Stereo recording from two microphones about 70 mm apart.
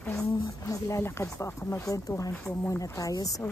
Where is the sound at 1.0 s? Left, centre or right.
Left.